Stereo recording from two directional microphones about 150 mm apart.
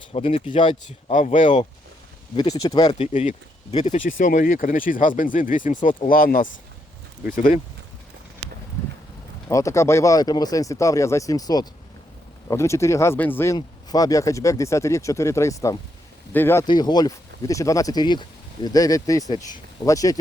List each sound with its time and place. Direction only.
0.1 s speech: 40° left (ahead or behind)
1.1 s speech: 60° left (ahead or behind)
2.3 s speech: 25° left (ahead or behind)
3.0 s speech: 50° left (ahead or behind)
6.1 s speech: 70° left (ahead or behind)
9.5 s speech: 20° left (ahead or behind)
16.6 s speech: 30° left (ahead or behind)